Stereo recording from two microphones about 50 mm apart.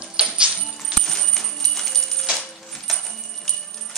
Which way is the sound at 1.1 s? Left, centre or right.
Centre.